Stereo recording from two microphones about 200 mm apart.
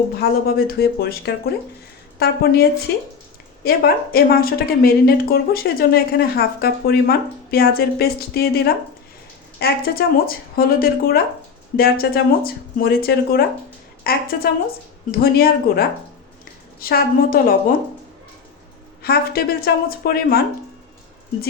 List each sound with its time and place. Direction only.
0.2 s speech: 50° left (ahead or behind)
19.0 s speech: 50° left (ahead or behind)